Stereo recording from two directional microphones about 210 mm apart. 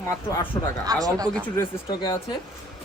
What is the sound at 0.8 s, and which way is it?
Speech, 15° right (ahead or behind).